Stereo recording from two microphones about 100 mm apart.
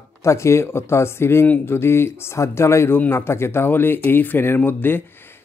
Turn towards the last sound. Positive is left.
turn(degrees=20)  # may be behind; listen again after turning